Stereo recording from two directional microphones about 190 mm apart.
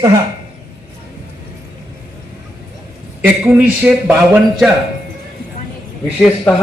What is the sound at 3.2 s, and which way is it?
A man's voice, 10° right (ahead or behind).